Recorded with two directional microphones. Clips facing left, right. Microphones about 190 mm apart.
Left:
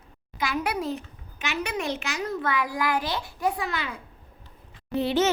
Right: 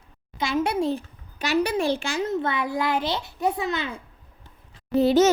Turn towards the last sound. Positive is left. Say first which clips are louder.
# right 6 dB
turn(degrees=-40)  # may be behind; listen again after turning